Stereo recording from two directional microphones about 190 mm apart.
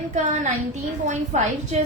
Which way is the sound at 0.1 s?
40° right (ahead or behind).